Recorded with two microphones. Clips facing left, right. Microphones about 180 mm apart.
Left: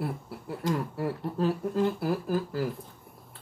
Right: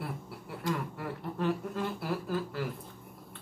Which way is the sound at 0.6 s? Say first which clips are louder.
Left 5 dB; 35° left (ahead or behind).